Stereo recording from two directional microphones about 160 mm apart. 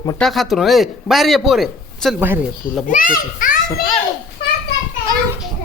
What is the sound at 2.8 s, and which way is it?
Speech, 60° left (ahead or behind).